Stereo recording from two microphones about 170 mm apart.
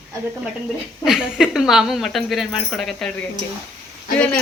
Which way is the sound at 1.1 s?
5° right (ahead or behind).